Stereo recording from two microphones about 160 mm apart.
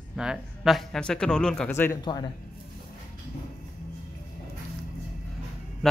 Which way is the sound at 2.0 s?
30° left (ahead or behind).